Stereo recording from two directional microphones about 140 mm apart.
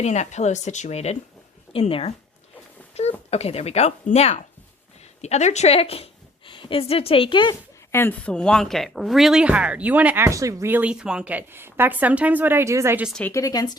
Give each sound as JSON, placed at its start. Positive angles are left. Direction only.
{"t": 0.0, "sound": "a woman's voice", "side_deg": 55}
{"t": 7.9, "sound": "a woman's voice", "side_deg": 10}
{"t": 10.2, "sound": "speech", "side_deg": -20}
{"t": 13.3, "sound": "speech", "side_deg": 25}